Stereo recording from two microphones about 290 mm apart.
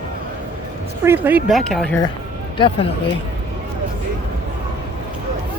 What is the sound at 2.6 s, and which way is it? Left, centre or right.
Speech, centre.